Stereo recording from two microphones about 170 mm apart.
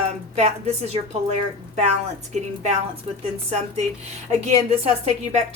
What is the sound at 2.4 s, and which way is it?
Speech, 40° right (ahead or behind).